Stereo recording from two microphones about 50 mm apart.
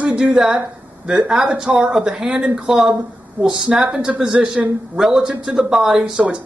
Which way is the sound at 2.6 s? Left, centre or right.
Centre.